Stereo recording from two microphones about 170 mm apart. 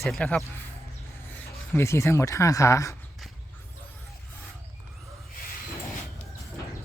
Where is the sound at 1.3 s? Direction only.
15° left (ahead or behind).